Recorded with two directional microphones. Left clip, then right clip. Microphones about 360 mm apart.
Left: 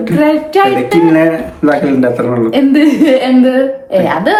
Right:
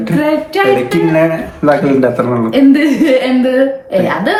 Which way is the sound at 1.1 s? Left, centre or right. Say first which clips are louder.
Left 2 dB; centre.